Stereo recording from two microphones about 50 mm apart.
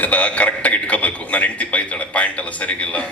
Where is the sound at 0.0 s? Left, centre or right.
Left.